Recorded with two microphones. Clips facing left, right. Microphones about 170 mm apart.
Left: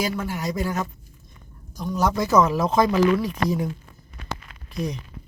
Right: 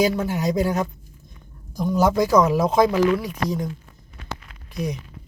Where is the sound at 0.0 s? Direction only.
20° right (ahead or behind).